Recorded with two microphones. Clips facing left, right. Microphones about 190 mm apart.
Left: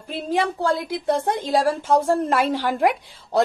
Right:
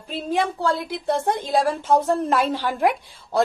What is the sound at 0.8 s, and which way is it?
Speech, 55° left (ahead or behind).